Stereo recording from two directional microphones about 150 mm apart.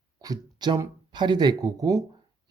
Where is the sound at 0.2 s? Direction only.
25° right (ahead or behind).